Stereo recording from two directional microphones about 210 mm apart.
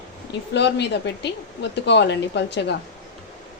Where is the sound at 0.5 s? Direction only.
55° left (ahead or behind).